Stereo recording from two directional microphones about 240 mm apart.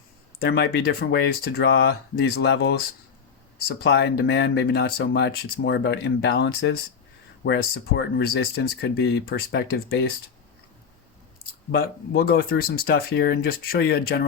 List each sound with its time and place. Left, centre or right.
0.3 s speech: left
3.8 s speech: left
11.7 s speech: left